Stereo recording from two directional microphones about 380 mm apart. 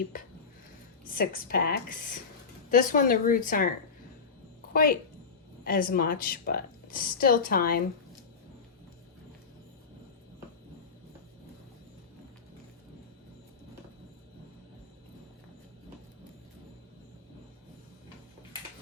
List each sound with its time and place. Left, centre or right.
1.0 s a woman's voice: left
4.7 s a woman's voice: left